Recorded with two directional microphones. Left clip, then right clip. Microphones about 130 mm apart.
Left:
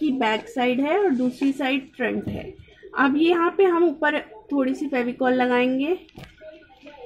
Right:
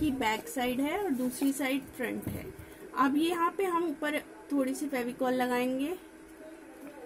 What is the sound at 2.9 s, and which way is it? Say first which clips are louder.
Speech: left 9 dB; 55° left (ahead or behind).